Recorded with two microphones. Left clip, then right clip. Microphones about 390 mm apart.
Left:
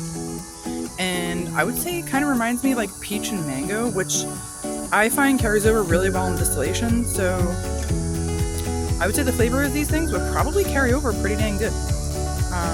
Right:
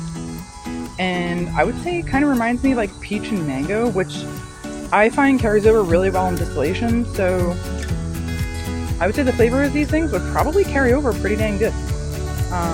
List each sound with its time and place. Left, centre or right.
0.9 s speech: left
9.0 s speech: left